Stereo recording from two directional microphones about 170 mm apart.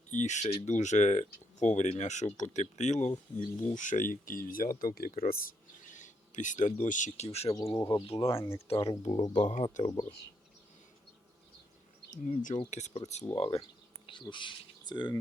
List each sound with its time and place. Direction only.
0.1 s speech: 45° left (ahead or behind)
5.8 s speech: 45° left (ahead or behind)
7.5 s speech: 20° left (ahead or behind)
7.9 s speech: 30° left (ahead or behind)
9.5 s speech: 40° left (ahead or behind)
9.8 s speech: 25° left (ahead or behind)
12.1 s speech: 50° left (ahead or behind); by 15.2 s 25° left (ahead or behind)